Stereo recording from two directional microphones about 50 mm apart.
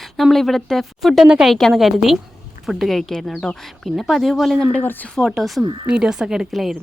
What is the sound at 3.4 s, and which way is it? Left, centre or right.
Speech, centre.